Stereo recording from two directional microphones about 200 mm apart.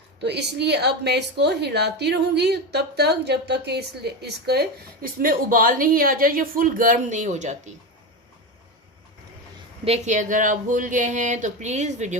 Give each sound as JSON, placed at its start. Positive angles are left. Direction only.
{"t": 0.2, "sound": "a woman's voice", "side_deg": -55}
{"t": 9.8, "sound": "speech", "side_deg": -35}